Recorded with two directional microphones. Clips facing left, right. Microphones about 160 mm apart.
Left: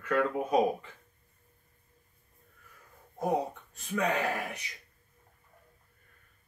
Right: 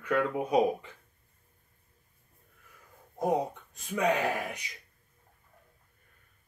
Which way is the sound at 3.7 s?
15° right (ahead or behind).